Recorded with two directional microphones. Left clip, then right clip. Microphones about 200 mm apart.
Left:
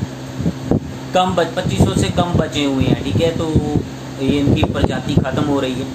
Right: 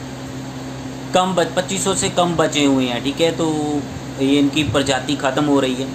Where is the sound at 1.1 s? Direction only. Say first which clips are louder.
Left 1 dB; 20° right (ahead or behind).